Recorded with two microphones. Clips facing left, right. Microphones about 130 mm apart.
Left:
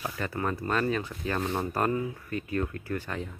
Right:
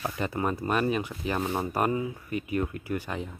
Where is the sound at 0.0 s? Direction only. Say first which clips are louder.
Right 2 dB; 20° right (ahead or behind).